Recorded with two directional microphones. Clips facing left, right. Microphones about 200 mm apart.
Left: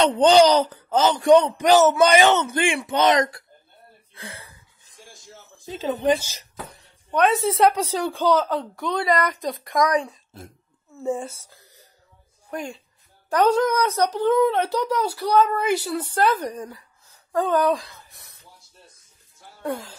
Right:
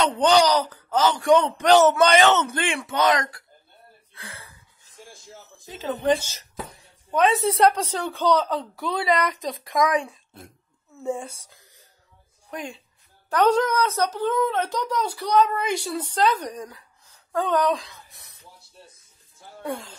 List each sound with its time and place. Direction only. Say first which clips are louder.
0.0 s speech: left 4 dB; 20° left (ahead or behind)
1.6 s speech: left 1 dB; 5° left (ahead or behind); by 3.4 s 20° left (ahead or behind)
4.1 s gasp: left 4 dB; 25° left (ahead or behind)
5.9 s a woman's voice: left 1 dB; 10° left (ahead or behind)
9.9 s a sound: left 2 dB; centre (ahead or behind)
11.1 s a woman's voice: left 2 dB; 5° left (ahead or behind)
12.4 s speech: left 3 dB; centre (ahead or behind)
19.6 s a woman's voice: left 2 dB; centre (ahead or behind)